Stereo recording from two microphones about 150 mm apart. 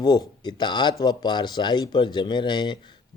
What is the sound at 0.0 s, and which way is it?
Speech, 30° left (ahead or behind).